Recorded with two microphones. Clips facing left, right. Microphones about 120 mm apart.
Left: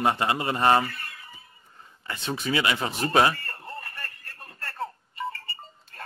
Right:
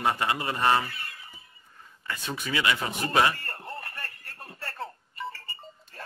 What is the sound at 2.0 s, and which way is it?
Speech, 25° left (ahead or behind).